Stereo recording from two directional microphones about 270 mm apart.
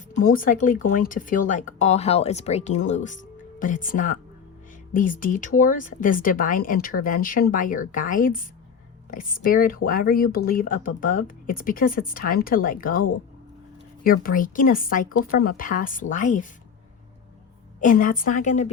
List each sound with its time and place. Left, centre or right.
0.2 s speech: left
17.7 s speech: left